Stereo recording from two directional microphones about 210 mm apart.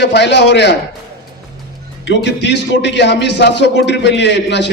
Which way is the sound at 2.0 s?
55° left (ahead or behind).